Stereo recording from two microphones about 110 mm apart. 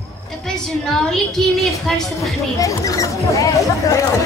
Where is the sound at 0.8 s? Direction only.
5° left (ahead or behind).